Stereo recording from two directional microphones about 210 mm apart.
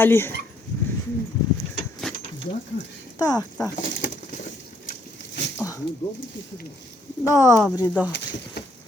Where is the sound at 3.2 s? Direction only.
20° left (ahead or behind).